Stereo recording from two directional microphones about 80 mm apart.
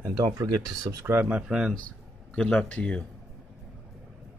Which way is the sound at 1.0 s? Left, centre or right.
Right.